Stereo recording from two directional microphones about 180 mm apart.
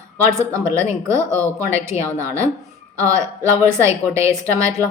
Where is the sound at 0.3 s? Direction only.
15° right (ahead or behind).